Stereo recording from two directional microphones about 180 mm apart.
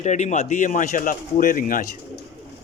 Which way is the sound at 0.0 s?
40° left (ahead or behind).